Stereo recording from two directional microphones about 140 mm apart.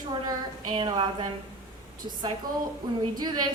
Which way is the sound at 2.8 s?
30° right (ahead or behind).